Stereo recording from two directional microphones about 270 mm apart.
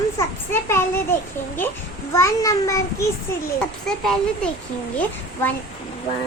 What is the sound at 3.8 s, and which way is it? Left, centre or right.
Speech, centre.